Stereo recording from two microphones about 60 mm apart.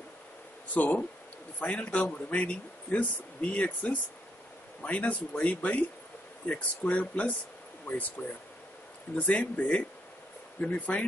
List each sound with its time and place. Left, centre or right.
0.7 s speech: left
9.1 s speech: left